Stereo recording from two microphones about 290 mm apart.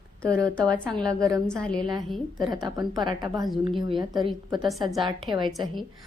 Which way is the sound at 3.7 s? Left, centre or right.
Centre.